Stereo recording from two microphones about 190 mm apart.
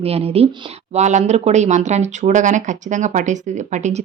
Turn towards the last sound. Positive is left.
turn(degrees=-40)  # may be behind; listen again after turning